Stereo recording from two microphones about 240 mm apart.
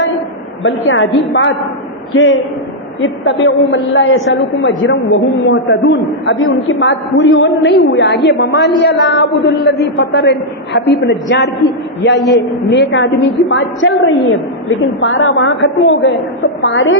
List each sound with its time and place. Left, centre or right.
0.6 s a woman's voice: left